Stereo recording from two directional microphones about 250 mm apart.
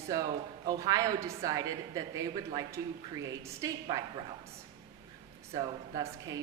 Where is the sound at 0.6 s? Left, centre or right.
Centre.